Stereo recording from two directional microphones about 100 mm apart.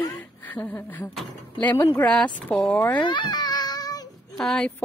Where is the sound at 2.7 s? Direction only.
20° left (ahead or behind).